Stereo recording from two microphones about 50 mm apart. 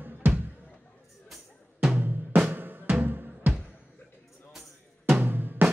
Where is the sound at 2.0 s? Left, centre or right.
Right.